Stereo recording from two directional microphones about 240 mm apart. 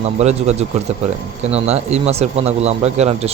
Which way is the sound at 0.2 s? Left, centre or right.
Right.